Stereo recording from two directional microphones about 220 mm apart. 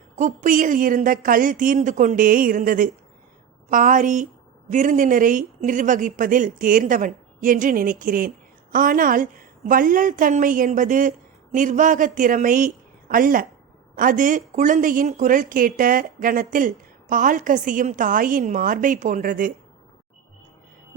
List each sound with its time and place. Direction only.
0.2 s a woman's voice: 35° right (ahead or behind)